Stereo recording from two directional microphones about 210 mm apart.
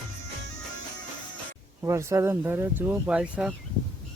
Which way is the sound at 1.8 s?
15° right (ahead or behind).